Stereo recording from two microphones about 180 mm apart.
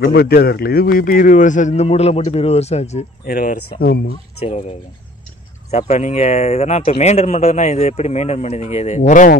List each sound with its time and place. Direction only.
0.0 s speech: 60° left (ahead or behind); by 3.1 s 40° left (ahead or behind)
3.3 s speech: 50° left (ahead or behind)
4.4 s speech: 35° left (ahead or behind)
5.7 s speech: 40° left (ahead or behind)